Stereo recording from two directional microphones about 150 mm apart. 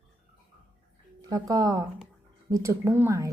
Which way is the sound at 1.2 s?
25° right (ahead or behind).